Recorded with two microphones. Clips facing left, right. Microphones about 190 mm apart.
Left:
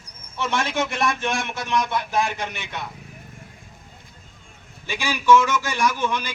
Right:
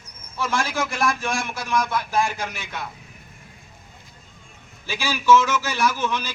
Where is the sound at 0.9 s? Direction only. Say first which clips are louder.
Even; centre (ahead or behind).